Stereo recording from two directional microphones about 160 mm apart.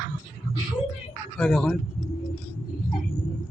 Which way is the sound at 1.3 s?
5° left (ahead or behind).